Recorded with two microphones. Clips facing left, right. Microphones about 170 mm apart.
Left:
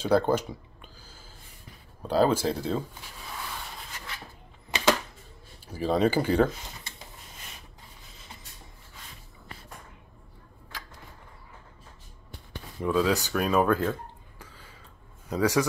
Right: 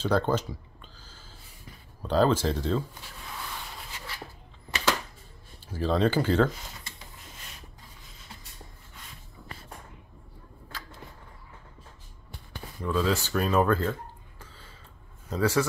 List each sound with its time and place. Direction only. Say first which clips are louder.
0.0 s speech: left 2 dB; 10° left (ahead or behind)
2.0 s speech: even; 10° left (ahead or behind)
4.6 s a sound: left 4 dB; 20° left (ahead or behind)
5.8 s speech: left 1 dB; 10° left (ahead or behind)
12.8 s speech: left 2 dB; 10° left (ahead or behind)
14.4 s a sound: left 1 dB; 10° left (ahead or behind)
15.2 s speech: left 1 dB; 15° left (ahead or behind)